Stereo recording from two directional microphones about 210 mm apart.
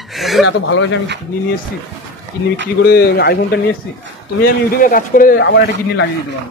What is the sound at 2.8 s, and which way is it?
A man's voice, 50° left (ahead or behind).